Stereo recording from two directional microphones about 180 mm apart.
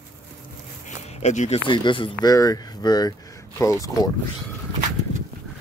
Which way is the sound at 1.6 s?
25° left (ahead or behind).